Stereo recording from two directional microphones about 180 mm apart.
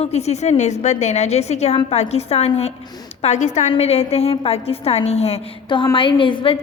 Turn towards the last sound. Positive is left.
turn(degrees=30)  # may be behind; listen again after turning